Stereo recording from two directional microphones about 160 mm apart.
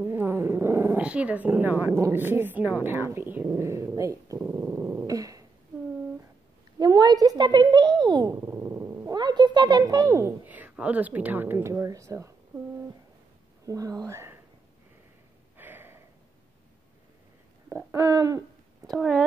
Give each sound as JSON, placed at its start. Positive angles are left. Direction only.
{"t": 0.0, "sound": "speech", "side_deg": -15}
{"t": 6.8, "sound": "a sound", "side_deg": -25}
{"t": 9.1, "sound": "a woman's voice", "side_deg": -25}
{"t": 13.7, "sound": "speech", "side_deg": -20}
{"t": 15.5, "sound": "snort", "side_deg": -15}
{"t": 17.9, "sound": "hoot", "side_deg": -20}
{"t": 18.9, "sound": "speech", "side_deg": 0}